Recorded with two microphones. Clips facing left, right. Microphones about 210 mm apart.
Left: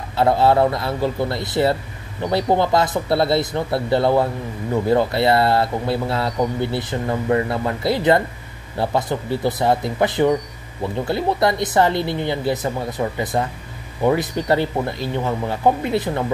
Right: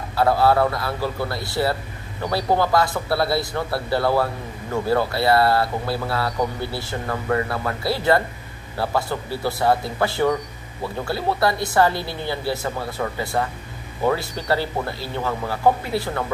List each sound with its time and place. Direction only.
0.1 s speech: 25° left (ahead or behind)